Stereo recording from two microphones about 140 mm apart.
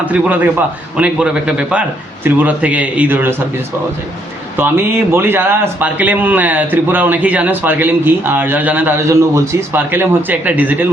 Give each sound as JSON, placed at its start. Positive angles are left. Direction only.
{"t": 0.0, "sound": "a man's voice", "side_deg": -10}
{"t": 4.5, "sound": "a man's voice", "side_deg": -15}